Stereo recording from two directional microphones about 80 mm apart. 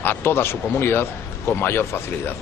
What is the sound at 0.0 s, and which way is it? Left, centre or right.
A man's voice, left.